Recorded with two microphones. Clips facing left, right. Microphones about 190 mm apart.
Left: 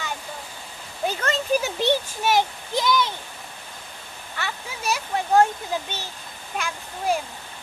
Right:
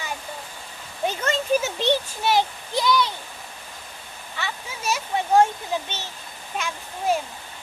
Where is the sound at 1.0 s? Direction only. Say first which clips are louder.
Right 1 dB; centre (ahead or behind).